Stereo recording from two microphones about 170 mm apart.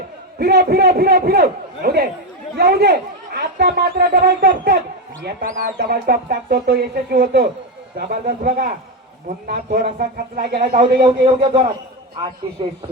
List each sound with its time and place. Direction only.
0.3 s speech: 70° right (ahead or behind)
5.2 s speech: 60° right (ahead or behind)
9.7 s speech: 55° right (ahead or behind)
11.0 s a man's voice: 35° right (ahead or behind)